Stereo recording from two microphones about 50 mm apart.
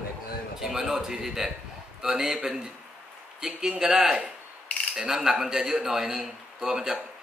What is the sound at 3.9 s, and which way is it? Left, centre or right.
Speech, centre.